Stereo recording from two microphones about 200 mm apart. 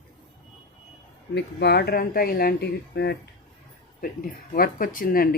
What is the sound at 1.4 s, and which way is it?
Speech, 55° left (ahead or behind).